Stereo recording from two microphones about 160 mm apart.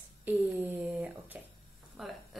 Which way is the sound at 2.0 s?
Centre (ahead or behind).